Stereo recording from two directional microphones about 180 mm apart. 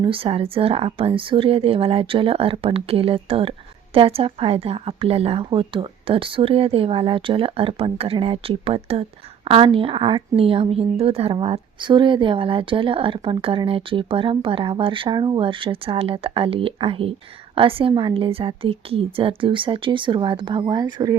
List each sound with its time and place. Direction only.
0.0 s a woman's voice: 30° right (ahead or behind)